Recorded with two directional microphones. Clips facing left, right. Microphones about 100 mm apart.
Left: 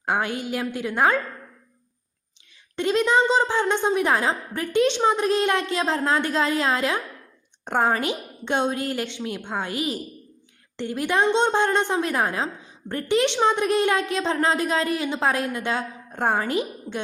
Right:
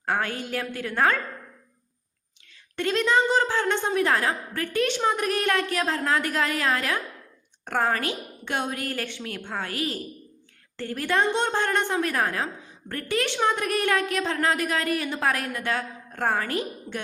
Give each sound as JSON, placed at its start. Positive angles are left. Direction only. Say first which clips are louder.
{"t": 0.0, "sound": "a woman's voice", "louder": "left 2 dB", "side_deg": 15}
{"t": 2.7, "sound": "a woman's voice", "louder": "left 3 dB", "side_deg": 15}